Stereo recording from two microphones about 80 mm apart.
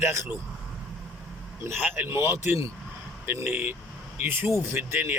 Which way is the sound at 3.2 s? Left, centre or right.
Right.